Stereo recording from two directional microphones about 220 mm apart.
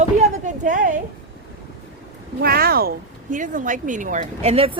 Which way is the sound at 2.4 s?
45° right (ahead or behind).